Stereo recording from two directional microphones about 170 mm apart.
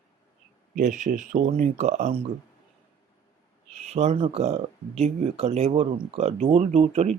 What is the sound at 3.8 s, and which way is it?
Speech, 40° right (ahead or behind).